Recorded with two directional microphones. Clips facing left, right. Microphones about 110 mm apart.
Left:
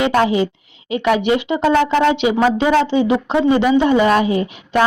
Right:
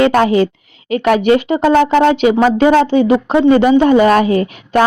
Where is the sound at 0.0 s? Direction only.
50° right (ahead or behind).